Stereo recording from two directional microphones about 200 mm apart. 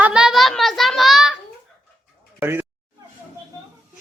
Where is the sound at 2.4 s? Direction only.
10° right (ahead or behind).